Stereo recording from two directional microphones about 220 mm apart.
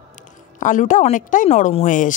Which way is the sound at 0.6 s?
35° left (ahead or behind).